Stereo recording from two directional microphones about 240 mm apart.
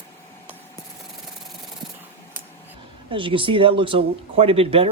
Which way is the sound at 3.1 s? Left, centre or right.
Right.